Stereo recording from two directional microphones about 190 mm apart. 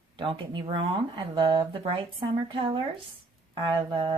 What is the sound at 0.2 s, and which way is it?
Speech, 25° right (ahead or behind).